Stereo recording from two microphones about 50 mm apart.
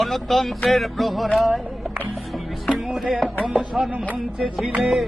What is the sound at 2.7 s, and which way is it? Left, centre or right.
Music, centre.